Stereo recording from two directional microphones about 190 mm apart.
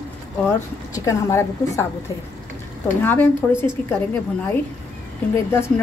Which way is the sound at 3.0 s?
10° left (ahead or behind).